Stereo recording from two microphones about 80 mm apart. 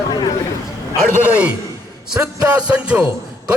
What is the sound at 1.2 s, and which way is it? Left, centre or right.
Speech, centre.